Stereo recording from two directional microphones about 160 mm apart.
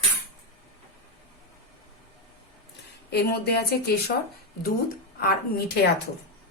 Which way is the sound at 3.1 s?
85° left.